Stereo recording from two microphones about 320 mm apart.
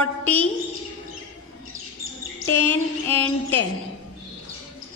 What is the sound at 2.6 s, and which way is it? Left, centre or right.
Mantra, centre.